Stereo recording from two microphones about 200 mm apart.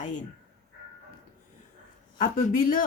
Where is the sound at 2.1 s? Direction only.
45° left (ahead or behind).